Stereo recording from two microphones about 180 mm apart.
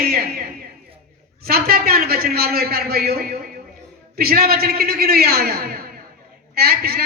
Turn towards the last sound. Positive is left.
turn(degrees=-60)  # may be behind; listen again after turning